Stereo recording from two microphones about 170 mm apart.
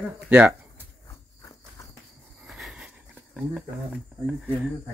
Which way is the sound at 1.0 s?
20° left (ahead or behind).